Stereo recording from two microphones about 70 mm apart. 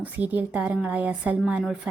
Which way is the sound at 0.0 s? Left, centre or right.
Right.